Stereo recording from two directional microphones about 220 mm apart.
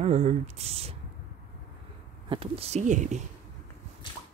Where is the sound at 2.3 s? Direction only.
25° right (ahead or behind).